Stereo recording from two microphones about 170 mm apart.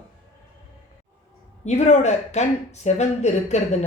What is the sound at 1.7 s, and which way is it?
Speech, 40° left (ahead or behind).